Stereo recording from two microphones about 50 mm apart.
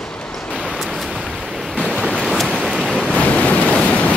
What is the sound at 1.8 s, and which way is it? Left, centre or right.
Waves, centre.